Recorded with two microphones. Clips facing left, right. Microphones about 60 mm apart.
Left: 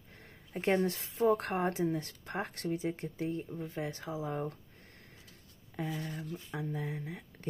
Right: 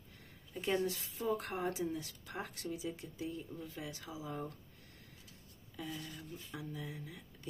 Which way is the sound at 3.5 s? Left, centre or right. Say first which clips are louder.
Left 7 dB; left.